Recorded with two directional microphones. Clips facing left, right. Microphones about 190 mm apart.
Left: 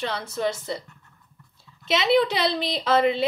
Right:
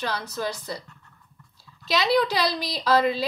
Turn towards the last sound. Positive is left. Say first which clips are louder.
# left 1 dB
turn(degrees=25)  # may be behind; listen again after turning